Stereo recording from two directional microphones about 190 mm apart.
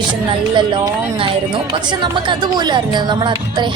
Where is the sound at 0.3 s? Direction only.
25° right (ahead or behind).